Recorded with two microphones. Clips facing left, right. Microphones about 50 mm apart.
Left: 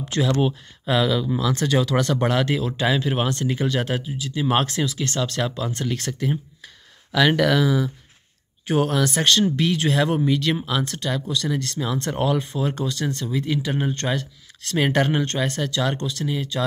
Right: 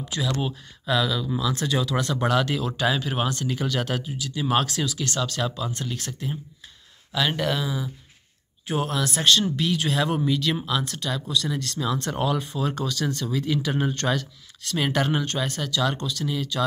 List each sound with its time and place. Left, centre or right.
0.2 s speech: centre
0.8 s speech: left
2.6 s speech: centre
3.0 s speech: left
7.1 s speech: left
8.6 s speech: left
14.0 s speech: centre
14.7 s speech: left